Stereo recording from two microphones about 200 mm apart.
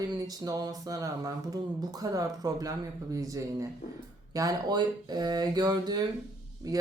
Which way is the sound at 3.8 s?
40° left (ahead or behind).